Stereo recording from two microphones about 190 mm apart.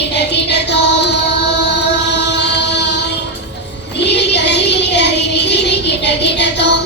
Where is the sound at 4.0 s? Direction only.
65° left (ahead or behind).